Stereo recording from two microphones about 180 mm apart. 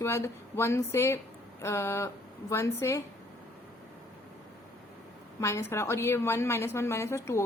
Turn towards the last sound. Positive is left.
turn(degrees=15)  # may be behind; listen again after turning